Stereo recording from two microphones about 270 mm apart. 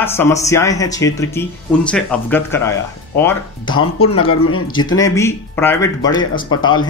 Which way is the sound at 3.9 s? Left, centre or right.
Left.